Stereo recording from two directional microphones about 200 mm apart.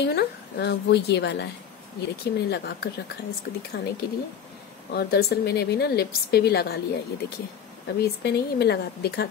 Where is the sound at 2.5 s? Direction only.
55° left (ahead or behind).